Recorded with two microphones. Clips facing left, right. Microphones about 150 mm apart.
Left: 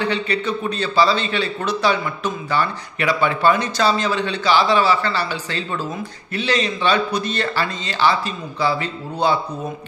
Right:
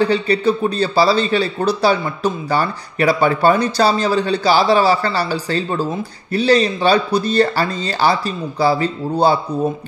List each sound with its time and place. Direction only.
0.0 s a man's voice: 35° right (ahead or behind)